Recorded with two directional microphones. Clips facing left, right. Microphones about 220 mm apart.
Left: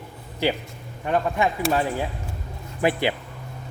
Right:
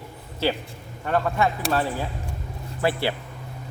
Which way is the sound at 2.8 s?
15° left (ahead or behind).